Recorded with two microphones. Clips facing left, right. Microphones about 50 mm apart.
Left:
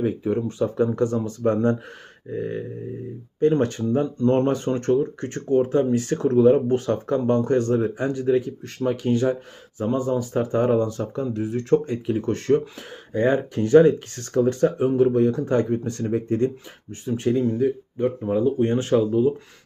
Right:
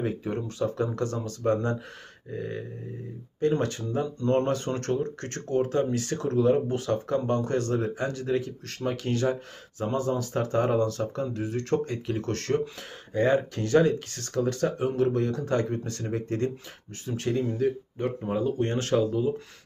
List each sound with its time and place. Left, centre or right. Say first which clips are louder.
0.0 s speech: left 7 dB; centre
0.4 s speech: left 6 dB; centre
5.9 s speech: left 7 dB; left
17.9 s speech: left 6 dB; centre
18.6 s speech: left 5 dB; centre